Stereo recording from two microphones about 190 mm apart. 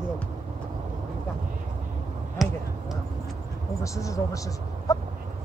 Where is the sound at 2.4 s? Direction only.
Centre (ahead or behind).